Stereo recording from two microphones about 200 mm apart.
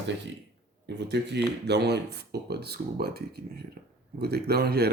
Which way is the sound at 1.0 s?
60° right (ahead or behind).